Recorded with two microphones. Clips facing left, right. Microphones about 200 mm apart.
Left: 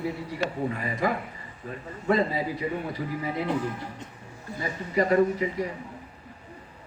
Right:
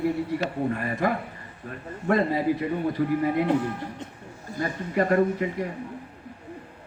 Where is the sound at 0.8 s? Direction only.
55° right (ahead or behind).